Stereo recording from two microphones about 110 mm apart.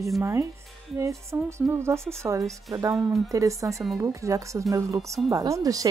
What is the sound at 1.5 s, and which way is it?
Speech, 25° right (ahead or behind).